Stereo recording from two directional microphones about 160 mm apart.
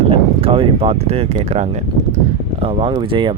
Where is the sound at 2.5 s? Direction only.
35° right (ahead or behind).